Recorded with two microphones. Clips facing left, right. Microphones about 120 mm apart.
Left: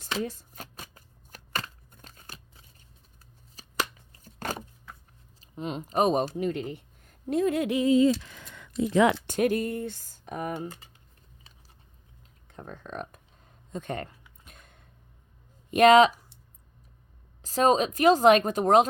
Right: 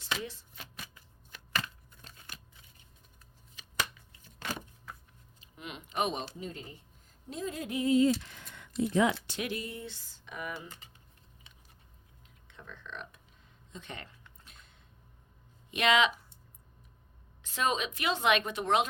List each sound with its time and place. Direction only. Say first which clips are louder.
0.0 s shuffling cards: left 6 dB; 45° left (ahead or behind)
5.4 s speech: left 11 dB; 35° left (ahead or behind)
6.3 s speech: left 13 dB; 70° left (ahead or behind)
8.9 s speech: left 6 dB; 85° left
9.2 s speech: left 12 dB; 50° left (ahead or behind)
12.5 s a sound: left 7 dB; 45° left (ahead or behind)
15.7 s speech: left 10 dB; 45° left (ahead or behind)
17.4 s a woman's voice: left 9 dB; 40° left (ahead or behind)